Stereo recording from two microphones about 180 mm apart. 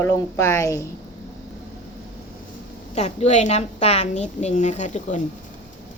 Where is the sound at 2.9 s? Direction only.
35° left (ahead or behind).